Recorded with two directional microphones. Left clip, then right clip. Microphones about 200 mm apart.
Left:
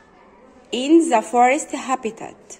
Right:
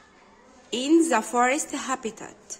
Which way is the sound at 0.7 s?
15° right (ahead or behind).